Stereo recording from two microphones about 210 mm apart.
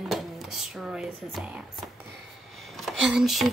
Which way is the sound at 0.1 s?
Centre (ahead or behind).